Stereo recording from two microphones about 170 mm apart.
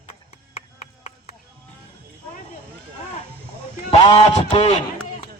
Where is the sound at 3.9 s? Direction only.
40° left (ahead or behind).